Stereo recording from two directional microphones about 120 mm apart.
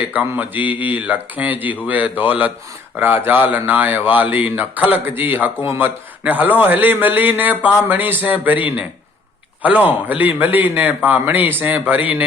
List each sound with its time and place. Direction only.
0.1 s a man's voice: 15° right (ahead or behind)
10.1 s a man's voice: 15° right (ahead or behind)